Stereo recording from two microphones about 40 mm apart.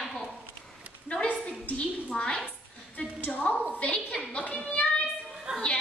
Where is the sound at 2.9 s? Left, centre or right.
Left.